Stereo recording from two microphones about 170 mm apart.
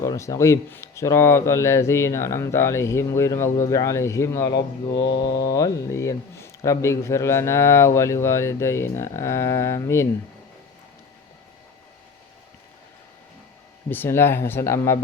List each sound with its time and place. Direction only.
0.0 s speech: 20° left (ahead or behind)
13.9 s speech: 15° left (ahead or behind)